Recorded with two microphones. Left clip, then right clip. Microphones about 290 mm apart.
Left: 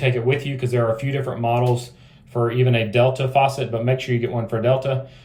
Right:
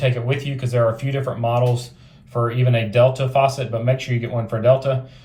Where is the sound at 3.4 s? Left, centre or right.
Right.